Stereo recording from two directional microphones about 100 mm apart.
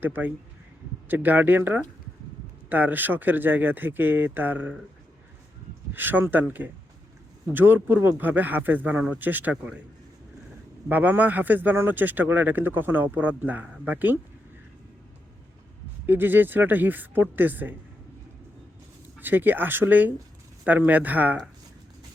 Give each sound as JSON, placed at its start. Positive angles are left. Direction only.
{"t": 0.0, "sound": "speech", "side_deg": -20}
{"t": 5.9, "sound": "speech", "side_deg": -20}
{"t": 10.8, "sound": "speech", "side_deg": -20}
{"t": 16.0, "sound": "speech", "side_deg": -20}
{"t": 19.2, "sound": "speech", "side_deg": -20}